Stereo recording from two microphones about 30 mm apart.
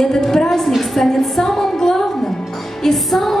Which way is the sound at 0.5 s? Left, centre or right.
Centre.